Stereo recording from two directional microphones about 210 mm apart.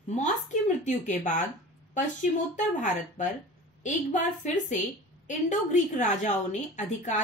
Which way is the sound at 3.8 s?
35° left (ahead or behind).